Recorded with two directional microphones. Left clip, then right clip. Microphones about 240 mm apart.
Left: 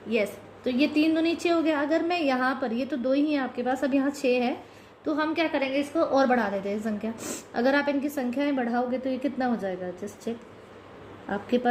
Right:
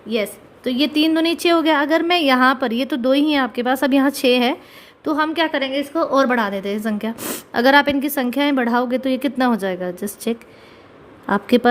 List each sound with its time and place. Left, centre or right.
0.1 s a woman's voice: right